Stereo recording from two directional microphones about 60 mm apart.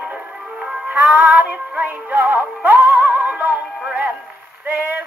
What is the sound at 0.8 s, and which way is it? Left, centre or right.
Synthetic singing, right.